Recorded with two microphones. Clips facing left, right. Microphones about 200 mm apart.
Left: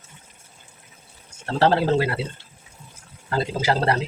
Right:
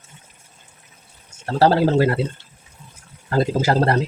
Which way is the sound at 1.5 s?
40° right (ahead or behind).